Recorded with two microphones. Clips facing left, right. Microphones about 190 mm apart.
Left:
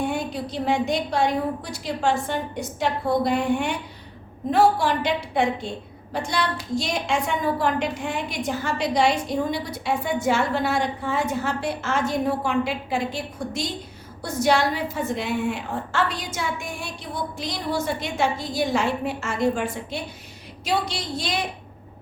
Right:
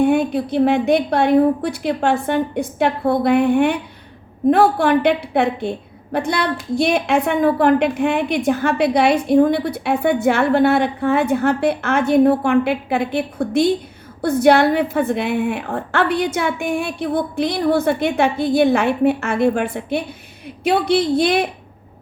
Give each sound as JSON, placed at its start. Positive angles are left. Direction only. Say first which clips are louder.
{"t": 0.0, "sound": "a woman's voice", "louder": "right 10 dB", "side_deg": -60}